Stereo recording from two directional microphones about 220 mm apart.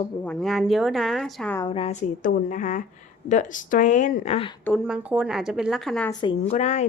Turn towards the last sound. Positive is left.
turn(degrees=30)  # may be behind; listen again after turning